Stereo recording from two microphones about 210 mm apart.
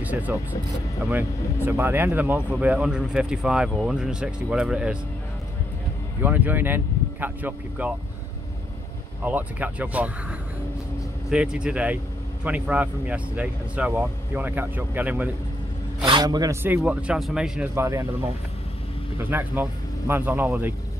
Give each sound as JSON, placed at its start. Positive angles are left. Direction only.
{"t": 0.0, "sound": "speech", "side_deg": -10}
{"t": 6.2, "sound": "speech", "side_deg": -10}
{"t": 9.2, "sound": "speech", "side_deg": -10}
{"t": 11.2, "sound": "speech", "side_deg": -5}
{"t": 16.1, "sound": "speech", "side_deg": -20}
{"t": 19.1, "sound": "speech", "side_deg": -10}